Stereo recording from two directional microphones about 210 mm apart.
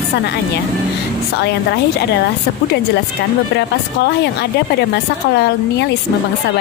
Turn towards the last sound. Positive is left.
turn(degrees=50)  # may be behind; listen again after turning